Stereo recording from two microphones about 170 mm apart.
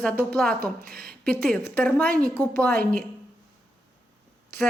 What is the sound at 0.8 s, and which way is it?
Speech, 60° right (ahead or behind).